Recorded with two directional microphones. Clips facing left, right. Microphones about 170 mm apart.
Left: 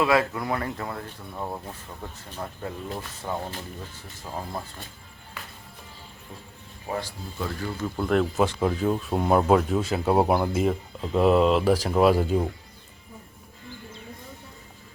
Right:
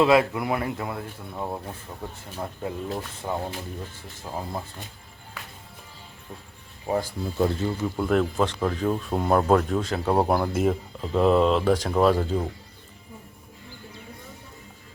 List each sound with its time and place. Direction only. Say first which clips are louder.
0.0 s speech: right 3 dB; 20° right (ahead or behind)
7.4 s speech: right 5 dB; 25° right (ahead or behind)
7.9 s speech: left 1 dB; centre (ahead or behind)